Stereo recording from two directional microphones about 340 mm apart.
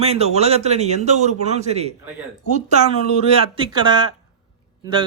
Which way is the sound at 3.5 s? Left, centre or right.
Centre.